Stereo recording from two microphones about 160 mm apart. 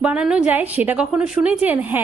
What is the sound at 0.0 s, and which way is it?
A woman's voice, 5° right (ahead or behind).